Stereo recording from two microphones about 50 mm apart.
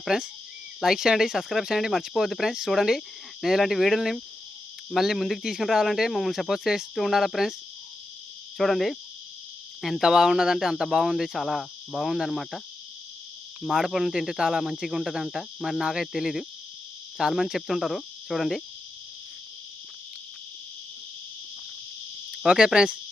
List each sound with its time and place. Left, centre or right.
0.1 s cricket: centre
1.5 s speech: centre
8.5 s speech: centre
10.0 s cricket: centre
10.8 s speech: centre
13.6 s cricket: centre
22.4 s cricket: centre